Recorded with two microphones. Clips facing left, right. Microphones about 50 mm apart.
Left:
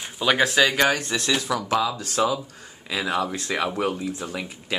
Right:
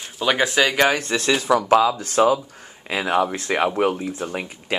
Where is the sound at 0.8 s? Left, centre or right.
Right.